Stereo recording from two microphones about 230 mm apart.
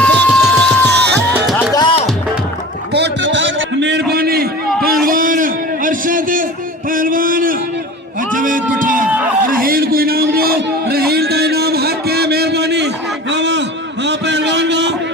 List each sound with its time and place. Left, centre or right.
0.0 s music: centre
0.9 s music: right
1.7 s music: centre
2.9 s a sound: right